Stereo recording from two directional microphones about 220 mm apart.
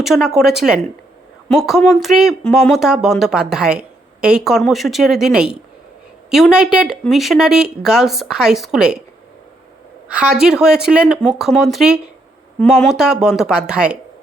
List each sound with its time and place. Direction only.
0.0 s speech: centre (ahead or behind)
10.1 s speech: 5° right (ahead or behind)